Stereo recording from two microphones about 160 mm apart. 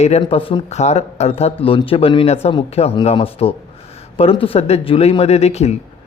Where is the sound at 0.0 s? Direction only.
40° left (ahead or behind).